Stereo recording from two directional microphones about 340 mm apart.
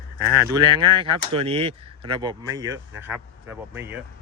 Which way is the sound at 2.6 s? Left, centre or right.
Right.